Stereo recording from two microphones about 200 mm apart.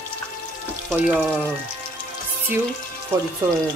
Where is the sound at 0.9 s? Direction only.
5° right (ahead or behind).